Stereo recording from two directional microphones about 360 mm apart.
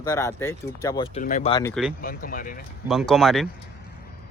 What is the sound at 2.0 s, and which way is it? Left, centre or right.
Speech, left.